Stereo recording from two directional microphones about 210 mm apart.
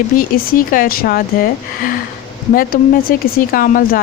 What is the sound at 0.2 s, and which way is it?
Speech, 40° left (ahead or behind).